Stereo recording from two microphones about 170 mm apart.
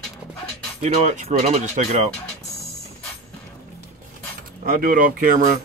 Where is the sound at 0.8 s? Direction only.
40° right (ahead or behind).